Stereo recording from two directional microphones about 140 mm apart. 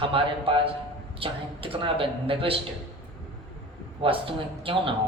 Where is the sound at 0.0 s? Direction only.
40° right (ahead or behind).